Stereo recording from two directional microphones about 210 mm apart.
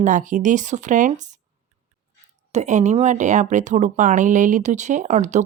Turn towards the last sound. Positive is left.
turn(degrees=-35)  # may be behind; listen again after turning